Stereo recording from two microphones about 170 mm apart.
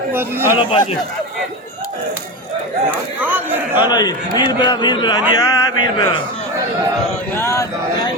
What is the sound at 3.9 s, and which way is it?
A man's voice, 25° left (ahead or behind).